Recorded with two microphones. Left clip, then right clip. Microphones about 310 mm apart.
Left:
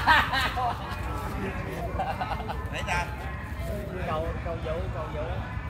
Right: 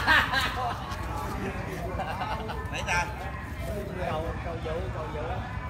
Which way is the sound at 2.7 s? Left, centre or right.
Centre.